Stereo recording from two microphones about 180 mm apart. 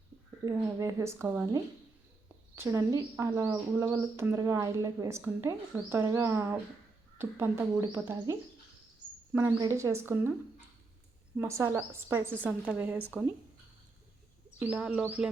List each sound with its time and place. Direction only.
0.4 s a woman's voice: 20° right (ahead or behind)
9.6 s a woman's voice: 15° right (ahead or behind)
11.3 s a woman's voice: 15° right (ahead or behind)
14.6 s a woman's voice: 5° right (ahead or behind)